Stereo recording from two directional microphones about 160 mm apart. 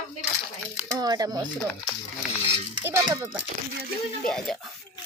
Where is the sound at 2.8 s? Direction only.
20° right (ahead or behind).